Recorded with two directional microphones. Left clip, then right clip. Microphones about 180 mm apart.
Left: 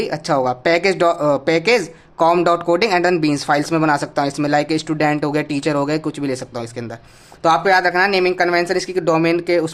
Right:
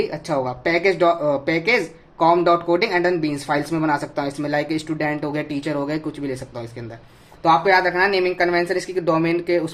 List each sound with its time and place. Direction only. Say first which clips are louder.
0.0 s speech: left 5 dB; 45° left (ahead or behind)